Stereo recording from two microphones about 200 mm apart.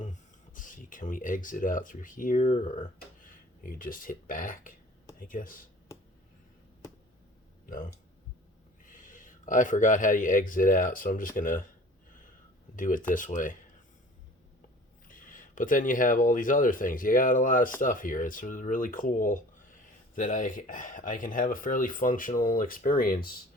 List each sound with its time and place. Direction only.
0.0 s speech: 40° left (ahead or behind)
8.9 s speech: 40° left (ahead or behind)
12.7 s speech: 40° left (ahead or behind)
15.0 s speech: 40° left (ahead or behind)